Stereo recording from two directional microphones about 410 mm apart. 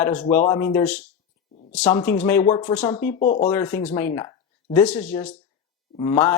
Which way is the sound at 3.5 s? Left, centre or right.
Centre.